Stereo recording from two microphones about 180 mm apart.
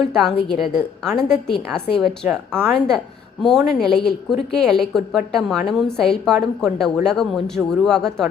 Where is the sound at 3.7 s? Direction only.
Centre (ahead or behind).